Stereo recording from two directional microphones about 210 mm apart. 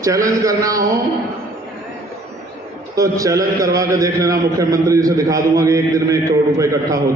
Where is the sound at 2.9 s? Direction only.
15° right (ahead or behind).